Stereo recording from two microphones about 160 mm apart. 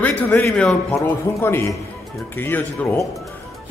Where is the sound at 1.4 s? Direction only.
15° left (ahead or behind).